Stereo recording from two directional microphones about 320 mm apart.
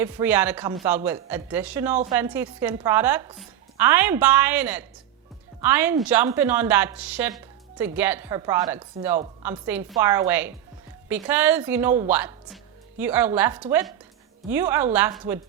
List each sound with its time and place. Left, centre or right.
0.0 s a woman's voice: centre